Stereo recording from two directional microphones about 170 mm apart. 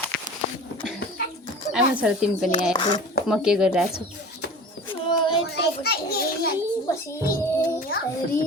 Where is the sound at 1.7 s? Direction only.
5° right (ahead or behind).